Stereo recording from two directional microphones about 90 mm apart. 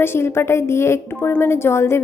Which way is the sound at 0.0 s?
25° left (ahead or behind).